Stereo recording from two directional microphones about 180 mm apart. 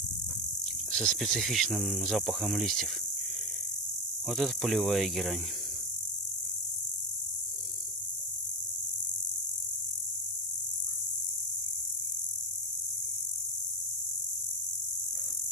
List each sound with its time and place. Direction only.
0.6 s cricket: 5° left (ahead or behind)
4.3 s cricket: centre (ahead or behind)